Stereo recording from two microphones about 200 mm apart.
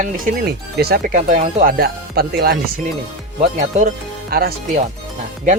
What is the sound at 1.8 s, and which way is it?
Speech, 50° right (ahead or behind).